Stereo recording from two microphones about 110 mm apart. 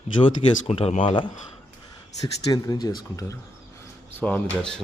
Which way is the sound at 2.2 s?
35° left (ahead or behind).